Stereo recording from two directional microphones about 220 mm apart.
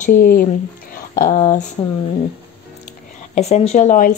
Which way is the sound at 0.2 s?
40° left (ahead or behind).